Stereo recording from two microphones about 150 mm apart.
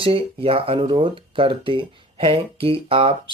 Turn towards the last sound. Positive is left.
turn(degrees=-35)  # may be behind; listen again after turning